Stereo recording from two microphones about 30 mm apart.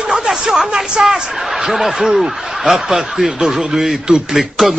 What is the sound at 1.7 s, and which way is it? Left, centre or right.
Speech, centre.